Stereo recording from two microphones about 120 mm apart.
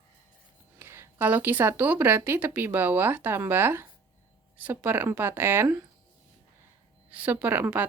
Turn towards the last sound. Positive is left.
turn(degrees=-15)  # may be behind; listen again after turning